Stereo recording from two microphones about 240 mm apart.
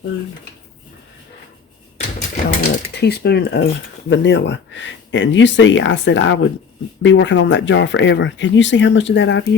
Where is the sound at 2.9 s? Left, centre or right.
Left.